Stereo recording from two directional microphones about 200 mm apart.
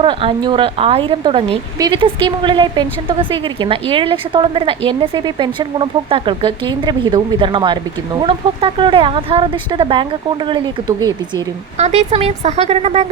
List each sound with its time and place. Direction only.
0.0 s a woman's voice: 25° right (ahead or behind)
11.8 s speech: 35° right (ahead or behind)